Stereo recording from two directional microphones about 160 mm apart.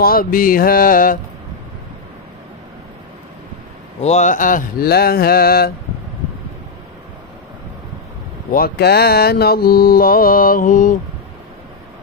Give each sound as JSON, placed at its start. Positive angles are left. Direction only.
{"t": 0.0, "sound": "mantra", "side_deg": 65}
{"t": 4.0, "sound": "a sound", "side_deg": 45}
{"t": 8.5, "sound": "mantra", "side_deg": 70}